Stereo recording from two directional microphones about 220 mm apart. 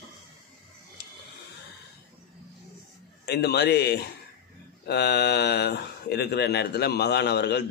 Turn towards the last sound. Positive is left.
turn(degrees=50)  # may be behind; listen again after turning